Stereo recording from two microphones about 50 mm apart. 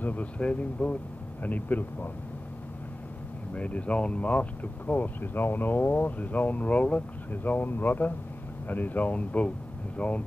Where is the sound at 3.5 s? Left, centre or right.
Left.